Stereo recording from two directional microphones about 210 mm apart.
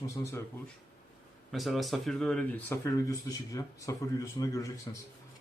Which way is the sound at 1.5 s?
Centre (ahead or behind).